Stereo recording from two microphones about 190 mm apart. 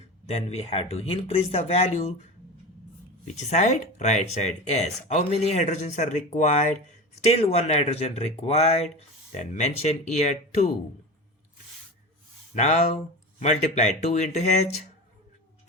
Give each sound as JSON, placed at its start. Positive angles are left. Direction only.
{"t": 0.3, "sound": "speech", "side_deg": 35}
{"t": 3.3, "sound": "speech", "side_deg": 35}
{"t": 12.5, "sound": "speech", "side_deg": 40}